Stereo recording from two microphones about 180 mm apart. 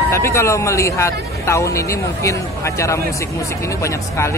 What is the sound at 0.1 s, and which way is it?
Speech, 15° left (ahead or behind).